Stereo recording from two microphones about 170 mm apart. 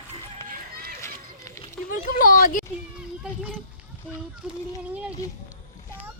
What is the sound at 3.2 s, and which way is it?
Speech, 5° right (ahead or behind).